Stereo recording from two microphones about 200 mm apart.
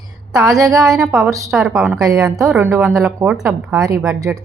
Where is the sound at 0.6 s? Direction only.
15° right (ahead or behind).